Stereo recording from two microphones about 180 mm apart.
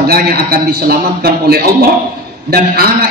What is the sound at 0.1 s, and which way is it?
A man's voice, 60° right (ahead or behind).